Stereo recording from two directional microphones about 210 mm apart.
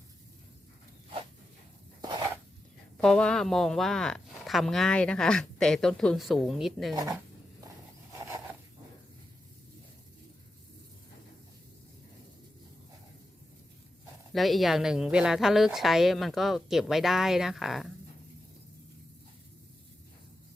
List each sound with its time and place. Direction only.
2.0 s a sound: 20° right (ahead or behind)
3.0 s speech: 5° left (ahead or behind)
14.3 s speech: centre (ahead or behind)